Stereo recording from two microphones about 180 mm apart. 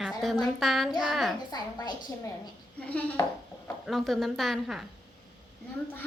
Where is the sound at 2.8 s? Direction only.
10° left (ahead or behind).